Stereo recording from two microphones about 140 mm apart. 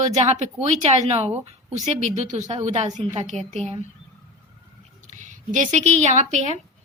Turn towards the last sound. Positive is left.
turn(degrees=-55)  # may be behind; listen again after turning